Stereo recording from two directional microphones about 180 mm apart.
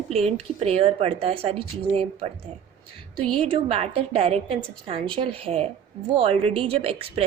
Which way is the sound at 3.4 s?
35° right (ahead or behind).